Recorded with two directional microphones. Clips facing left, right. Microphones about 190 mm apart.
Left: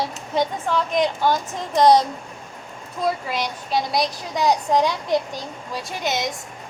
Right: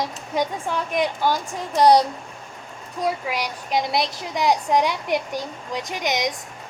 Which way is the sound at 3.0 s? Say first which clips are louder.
Left 1 dB; 10° right (ahead or behind).